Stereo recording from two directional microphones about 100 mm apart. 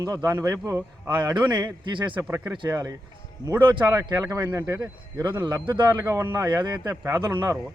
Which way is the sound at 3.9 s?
35° right (ahead or behind).